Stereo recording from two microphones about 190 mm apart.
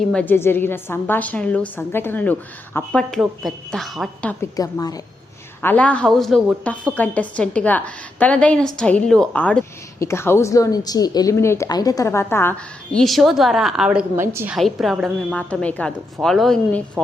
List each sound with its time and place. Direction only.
0.1 s a woman's voice: 10° left (ahead or behind)
4.5 s a woman's voice: 20° left (ahead or behind)
5.6 s a woman's voice: 5° left (ahead or behind); by 14.6 s 10° right (ahead or behind)
14.6 s a woman's voice: centre (ahead or behind)